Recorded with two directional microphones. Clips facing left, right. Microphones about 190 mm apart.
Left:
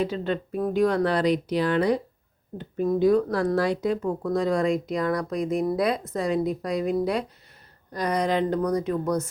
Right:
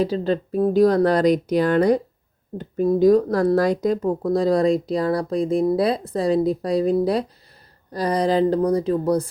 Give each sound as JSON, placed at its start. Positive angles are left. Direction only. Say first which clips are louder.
{"t": 0.0, "sound": "speech", "louder": "right 5 dB", "side_deg": -35}